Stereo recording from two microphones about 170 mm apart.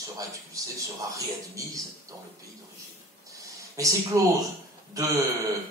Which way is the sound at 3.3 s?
20° right (ahead or behind).